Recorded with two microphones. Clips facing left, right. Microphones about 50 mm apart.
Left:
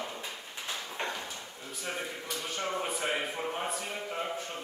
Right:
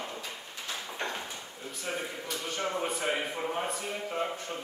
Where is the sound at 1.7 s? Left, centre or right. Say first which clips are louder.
Right 1 dB; centre.